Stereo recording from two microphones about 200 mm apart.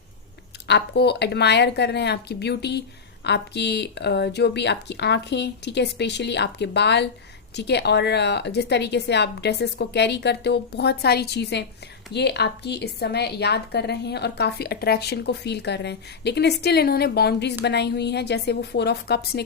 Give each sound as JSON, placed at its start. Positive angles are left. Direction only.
{"t": 0.7, "sound": "a woman's voice", "side_deg": 55}